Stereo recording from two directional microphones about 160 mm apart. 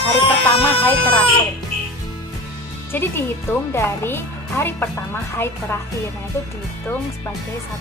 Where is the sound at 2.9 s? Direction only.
15° left (ahead or behind).